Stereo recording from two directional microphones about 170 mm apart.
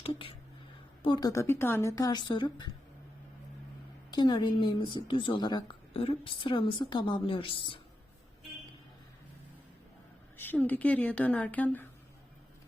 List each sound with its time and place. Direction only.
0.0 s a woman's voice: 30° left (ahead or behind)
1.3 s a woman's voice: 15° left (ahead or behind)
4.1 s a woman's voice: 25° left (ahead or behind)
10.3 s a woman's voice: 10° left (ahead or behind)